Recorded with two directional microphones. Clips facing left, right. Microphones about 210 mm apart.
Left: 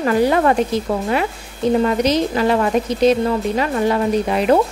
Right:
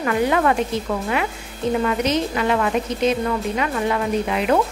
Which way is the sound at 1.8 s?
35° left (ahead or behind).